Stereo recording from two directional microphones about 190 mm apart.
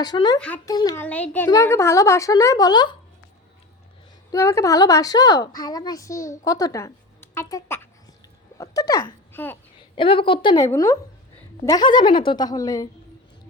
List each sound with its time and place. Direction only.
0.0 s a woman's voice: 20° left (ahead or behind)
0.3 s a woman's voice: 10° left (ahead or behind)
0.7 s a woman's voice: 20° left (ahead or behind)
1.0 s a woman's voice: 10° left (ahead or behind)
4.3 s a woman's voice: 15° left (ahead or behind)
9.9 s a woman's voice: 25° left (ahead or behind)